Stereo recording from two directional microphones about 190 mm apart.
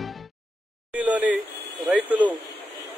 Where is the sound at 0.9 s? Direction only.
5° right (ahead or behind).